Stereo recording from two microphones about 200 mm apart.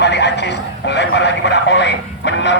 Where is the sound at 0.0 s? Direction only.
60° left (ahead or behind).